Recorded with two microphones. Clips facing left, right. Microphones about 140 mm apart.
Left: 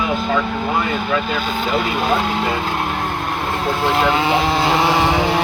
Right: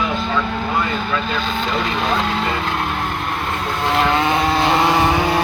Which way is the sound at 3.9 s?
5° left (ahead or behind).